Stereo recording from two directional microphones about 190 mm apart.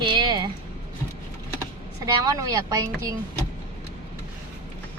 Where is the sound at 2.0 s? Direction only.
15° right (ahead or behind).